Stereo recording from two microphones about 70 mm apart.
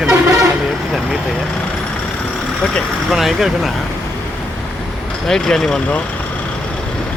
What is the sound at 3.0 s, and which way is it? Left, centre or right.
Speech, centre.